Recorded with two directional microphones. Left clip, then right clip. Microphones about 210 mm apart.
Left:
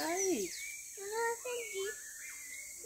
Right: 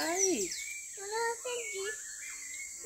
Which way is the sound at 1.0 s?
15° right (ahead or behind).